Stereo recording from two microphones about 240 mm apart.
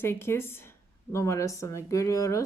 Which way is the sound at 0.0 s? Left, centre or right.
Centre.